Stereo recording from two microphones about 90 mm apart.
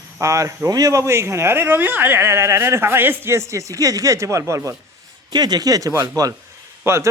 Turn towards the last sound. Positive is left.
turn(degrees=-30)  # may be behind; listen again after turning